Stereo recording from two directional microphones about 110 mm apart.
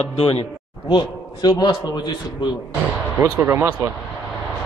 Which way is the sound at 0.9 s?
45° left (ahead or behind).